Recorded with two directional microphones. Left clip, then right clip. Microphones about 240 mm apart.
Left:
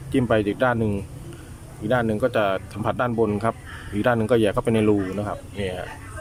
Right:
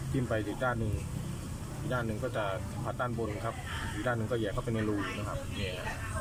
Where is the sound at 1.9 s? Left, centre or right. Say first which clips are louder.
Left 14 dB; left.